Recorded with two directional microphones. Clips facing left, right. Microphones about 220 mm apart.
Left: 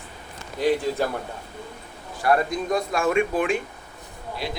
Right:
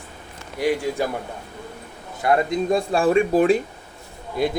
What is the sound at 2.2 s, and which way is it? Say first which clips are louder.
Speech: right 2 dB; 20° right (ahead or behind).